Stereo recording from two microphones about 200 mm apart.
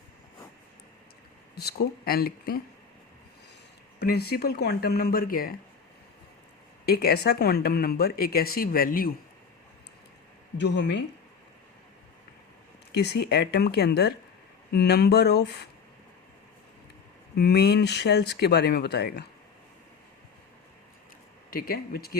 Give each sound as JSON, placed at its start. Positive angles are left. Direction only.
{"t": 1.5, "sound": "speech", "side_deg": 55}
{"t": 4.0, "sound": "speech", "side_deg": 50}
{"t": 6.8, "sound": "speech", "side_deg": 50}
{"t": 10.6, "sound": "speech", "side_deg": 60}
{"t": 12.9, "sound": "speech", "side_deg": 55}
{"t": 17.3, "sound": "speech", "side_deg": 55}
{"t": 21.5, "sound": "speech", "side_deg": 50}